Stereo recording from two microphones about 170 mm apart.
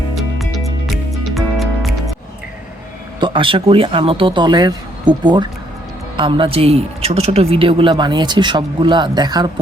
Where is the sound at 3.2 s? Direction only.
30° right (ahead or behind).